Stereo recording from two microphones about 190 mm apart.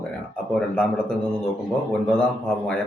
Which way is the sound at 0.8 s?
5° left (ahead or behind).